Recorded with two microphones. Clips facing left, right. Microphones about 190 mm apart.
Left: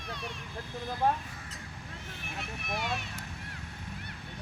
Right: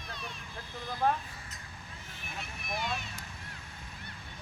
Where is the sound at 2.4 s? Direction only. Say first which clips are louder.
Left 1 dB; 70° left (ahead or behind).